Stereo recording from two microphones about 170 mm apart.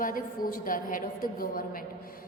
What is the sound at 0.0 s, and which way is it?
A woman's voice, 55° left (ahead or behind).